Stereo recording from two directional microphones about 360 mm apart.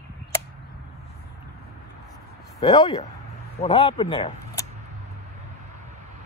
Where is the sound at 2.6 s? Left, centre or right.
Centre.